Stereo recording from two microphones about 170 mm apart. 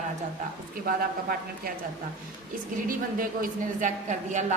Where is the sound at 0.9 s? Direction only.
60° right (ahead or behind).